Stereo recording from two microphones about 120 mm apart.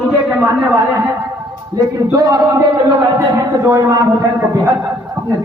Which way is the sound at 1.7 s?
25° right (ahead or behind).